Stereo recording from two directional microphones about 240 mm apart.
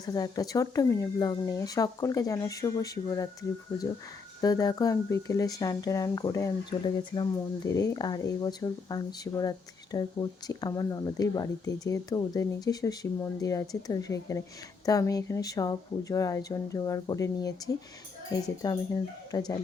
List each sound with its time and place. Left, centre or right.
0.0 s speech: centre
4.4 s speech: centre